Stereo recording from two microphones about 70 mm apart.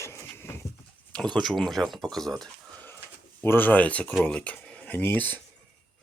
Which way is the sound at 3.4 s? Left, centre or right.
Left.